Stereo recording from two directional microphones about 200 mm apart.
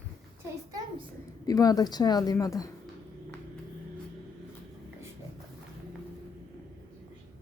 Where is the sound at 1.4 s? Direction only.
20° left (ahead or behind).